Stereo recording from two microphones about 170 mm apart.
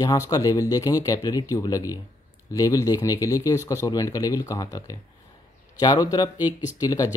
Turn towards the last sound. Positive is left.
turn(degrees=20)  # may be behind; listen again after turning